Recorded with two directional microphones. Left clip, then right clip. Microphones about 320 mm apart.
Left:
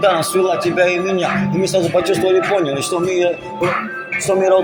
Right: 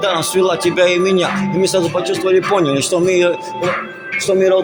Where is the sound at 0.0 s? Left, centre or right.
Centre.